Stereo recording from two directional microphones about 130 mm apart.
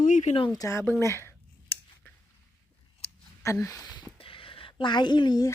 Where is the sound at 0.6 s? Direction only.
20° left (ahead or behind).